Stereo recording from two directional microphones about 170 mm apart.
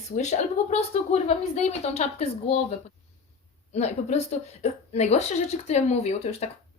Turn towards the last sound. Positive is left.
turn(degrees=40)  # may be behind; listen again after turning